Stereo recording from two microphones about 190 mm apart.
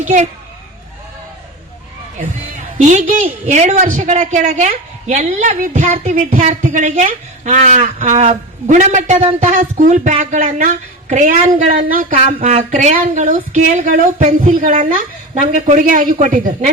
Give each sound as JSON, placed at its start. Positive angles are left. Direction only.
{"t": 2.1, "sound": "speech", "side_deg": -40}